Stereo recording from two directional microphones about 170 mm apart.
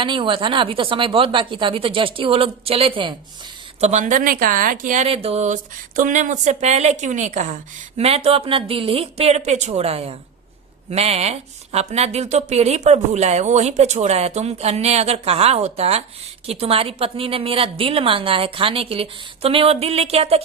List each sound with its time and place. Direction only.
0.0 s a woman's voice: 30° right (ahead or behind)
3.8 s a woman's voice: 40° right (ahead or behind)
5.0 s a woman's voice: 35° right (ahead or behind)